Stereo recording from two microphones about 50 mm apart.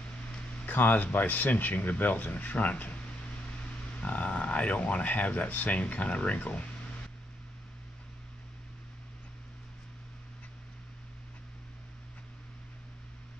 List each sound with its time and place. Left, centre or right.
0.7 s speech: left